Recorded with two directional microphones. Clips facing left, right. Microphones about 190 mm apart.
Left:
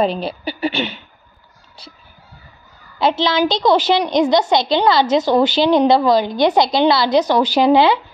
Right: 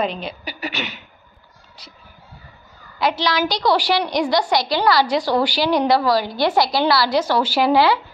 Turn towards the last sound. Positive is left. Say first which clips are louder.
# left 3 dB
turn(degrees=20)  # may be behind; listen again after turning